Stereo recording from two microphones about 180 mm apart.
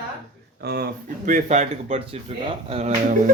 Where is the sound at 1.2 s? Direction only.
45° right (ahead or behind).